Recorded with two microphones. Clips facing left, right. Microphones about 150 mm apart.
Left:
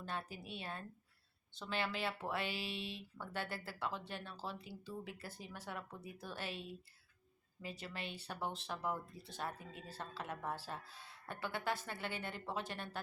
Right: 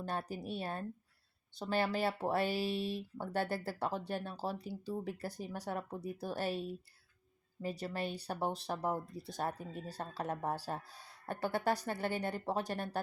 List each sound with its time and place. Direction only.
0.0 s speech: 40° right (ahead or behind)